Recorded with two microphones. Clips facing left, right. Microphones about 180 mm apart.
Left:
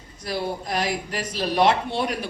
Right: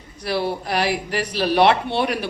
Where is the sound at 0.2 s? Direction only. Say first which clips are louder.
Right 4 dB; 75° right (ahead or behind).